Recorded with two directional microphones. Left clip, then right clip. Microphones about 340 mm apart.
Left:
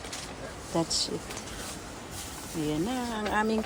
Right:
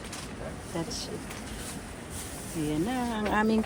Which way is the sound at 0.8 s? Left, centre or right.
Centre.